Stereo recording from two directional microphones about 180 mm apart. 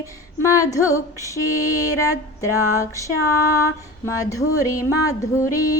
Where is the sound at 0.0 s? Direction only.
15° left (ahead or behind).